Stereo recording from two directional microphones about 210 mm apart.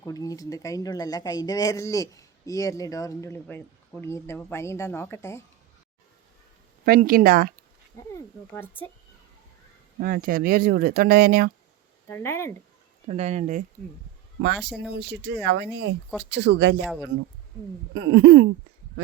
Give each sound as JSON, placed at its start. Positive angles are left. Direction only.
{"t": 0.0, "sound": "speech", "side_deg": 15}
{"t": 6.8, "sound": "speech", "side_deg": -45}
{"t": 7.9, "sound": "speech", "side_deg": 10}
{"t": 10.0, "sound": "speech", "side_deg": -40}
{"t": 12.0, "sound": "speech", "side_deg": 10}
{"t": 13.1, "sound": "speech", "side_deg": -30}
{"t": 14.4, "sound": "speech", "side_deg": -55}
{"t": 17.9, "sound": "speech", "side_deg": -55}